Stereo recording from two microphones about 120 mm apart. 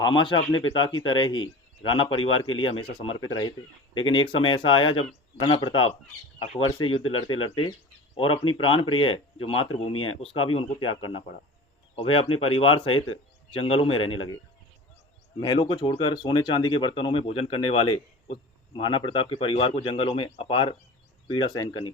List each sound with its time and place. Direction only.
0.0 s speech: 40° left (ahead or behind)
15.4 s speech: 35° left (ahead or behind)